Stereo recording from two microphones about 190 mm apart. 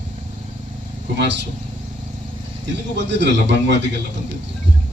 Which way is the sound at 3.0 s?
65° right (ahead or behind).